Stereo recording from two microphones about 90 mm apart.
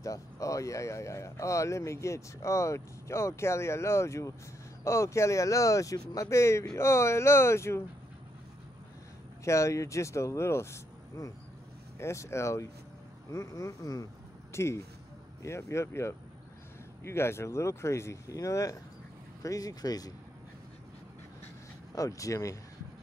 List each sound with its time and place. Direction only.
0.0 s speech: 40° left (ahead or behind)
9.4 s speech: 35° left (ahead or behind)
21.9 s speech: 40° left (ahead or behind)